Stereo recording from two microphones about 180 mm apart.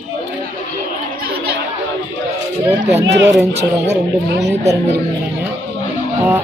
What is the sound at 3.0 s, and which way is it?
Speech, 80° right.